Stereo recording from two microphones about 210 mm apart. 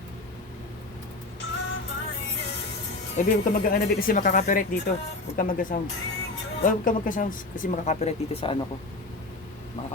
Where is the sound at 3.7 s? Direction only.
45° left (ahead or behind).